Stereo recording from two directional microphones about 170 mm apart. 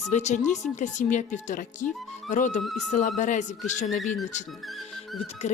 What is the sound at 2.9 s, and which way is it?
A woman's voice, 45° left (ahead or behind).